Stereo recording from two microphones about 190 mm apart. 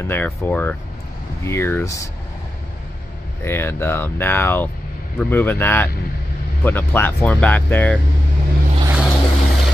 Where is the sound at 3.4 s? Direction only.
15° left (ahead or behind).